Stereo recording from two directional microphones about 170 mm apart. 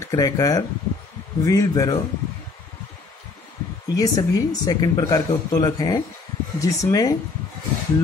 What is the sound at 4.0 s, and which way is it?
Speech, 20° left (ahead or behind).